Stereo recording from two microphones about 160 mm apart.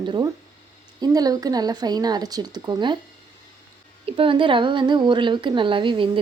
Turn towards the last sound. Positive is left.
turn(degrees=-30)  # may be behind; listen again after turning